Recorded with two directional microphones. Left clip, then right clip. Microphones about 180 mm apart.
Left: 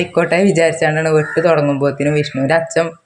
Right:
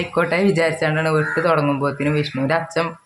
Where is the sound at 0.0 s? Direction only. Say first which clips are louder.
Left 5 dB; 15° left (ahead or behind).